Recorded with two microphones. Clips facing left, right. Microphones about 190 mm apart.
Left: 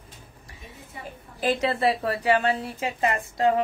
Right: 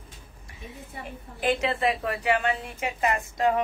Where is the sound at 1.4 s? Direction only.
35° left (ahead or behind).